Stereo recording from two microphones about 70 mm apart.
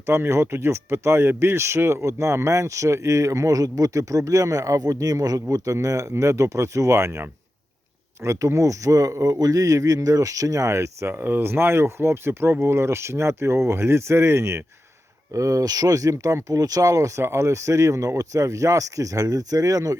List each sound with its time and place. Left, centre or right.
0.0 s speech: right
11.1 s speech: right